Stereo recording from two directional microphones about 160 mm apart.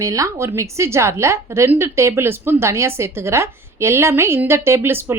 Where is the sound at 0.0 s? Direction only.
20° right (ahead or behind).